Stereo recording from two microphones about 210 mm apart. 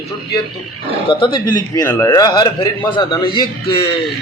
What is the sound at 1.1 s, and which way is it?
A man's voice, 20° left (ahead or behind).